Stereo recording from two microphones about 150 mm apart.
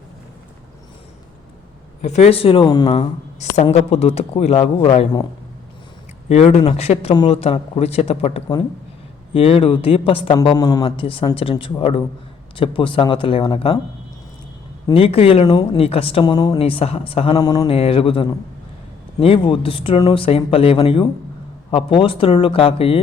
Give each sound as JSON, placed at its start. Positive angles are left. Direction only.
{"t": 2.0, "sound": "speech", "side_deg": 50}
{"t": 3.5, "sound": "speech", "side_deg": 45}
{"t": 6.2, "sound": "speech", "side_deg": 50}
{"t": 14.9, "sound": "speech", "side_deg": 40}
{"t": 15.4, "sound": "speech", "side_deg": 30}
{"t": 15.8, "sound": "speech", "side_deg": 40}
{"t": 16.2, "sound": "speech", "side_deg": 25}
{"t": 16.6, "sound": "speech", "side_deg": 40}
{"t": 17.4, "sound": "speech", "side_deg": 25}
{"t": 17.7, "sound": "speech", "side_deg": 40}